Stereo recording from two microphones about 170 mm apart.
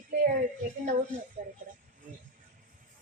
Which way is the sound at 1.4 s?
55° right (ahead or behind).